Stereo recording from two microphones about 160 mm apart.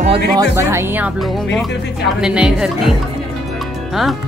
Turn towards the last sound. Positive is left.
turn(degrees=0)  # may be behind; listen again after turning